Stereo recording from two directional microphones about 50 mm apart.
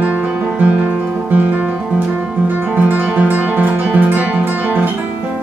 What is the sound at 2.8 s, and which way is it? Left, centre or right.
Guitar, right.